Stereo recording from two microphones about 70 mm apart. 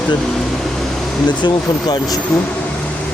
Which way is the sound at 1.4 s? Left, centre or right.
Left.